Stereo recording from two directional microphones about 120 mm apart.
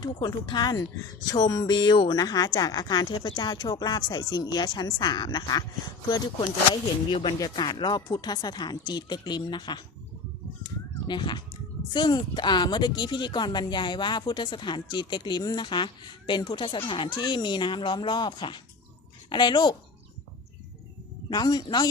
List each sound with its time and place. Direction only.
0.0 s speech: 35° left (ahead or behind)
7.1 s speech: 50° left (ahead or behind)
7.3 s speech: 35° left (ahead or behind)
11.1 s speech: 40° left (ahead or behind)
21.2 s speech: 35° left (ahead or behind)